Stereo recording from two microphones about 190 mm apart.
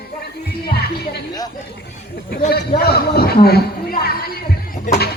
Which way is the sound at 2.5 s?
55° left (ahead or behind).